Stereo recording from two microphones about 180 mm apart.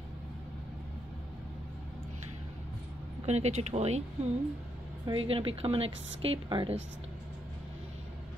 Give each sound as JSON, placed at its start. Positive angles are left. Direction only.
{"t": 3.3, "sound": "speech", "side_deg": -35}